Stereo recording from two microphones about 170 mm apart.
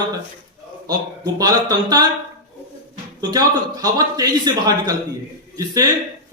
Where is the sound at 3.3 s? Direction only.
20° right (ahead or behind).